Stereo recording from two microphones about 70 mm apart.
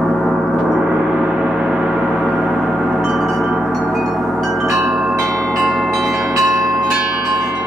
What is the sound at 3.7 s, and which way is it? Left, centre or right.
Wind chime, centre.